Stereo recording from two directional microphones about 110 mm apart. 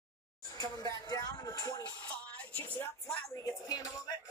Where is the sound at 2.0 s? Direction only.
15° left (ahead or behind).